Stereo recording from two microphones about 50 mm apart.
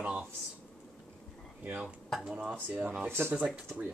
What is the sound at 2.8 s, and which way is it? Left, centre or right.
Speech, right.